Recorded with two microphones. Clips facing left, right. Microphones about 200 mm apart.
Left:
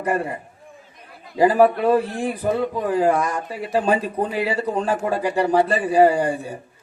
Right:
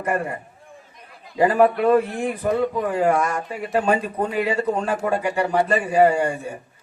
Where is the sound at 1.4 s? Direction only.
35° left (ahead or behind).